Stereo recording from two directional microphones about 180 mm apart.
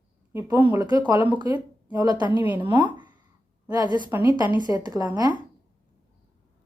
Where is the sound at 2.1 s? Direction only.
25° left (ahead or behind).